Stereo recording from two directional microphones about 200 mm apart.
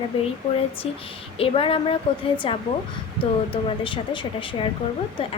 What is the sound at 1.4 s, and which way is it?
A woman's voice, 25° left (ahead or behind).